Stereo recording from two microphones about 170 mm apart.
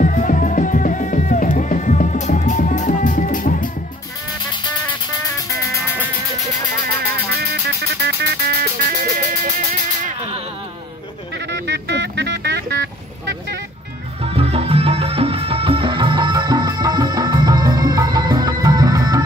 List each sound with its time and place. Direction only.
0.0 s music: 50° left (ahead or behind)
7.1 s music: 65° right (ahead or behind)
9.2 s music: 45° right (ahead or behind)
11.5 s vehicle: 90° right
14.2 s music: 35° right (ahead or behind)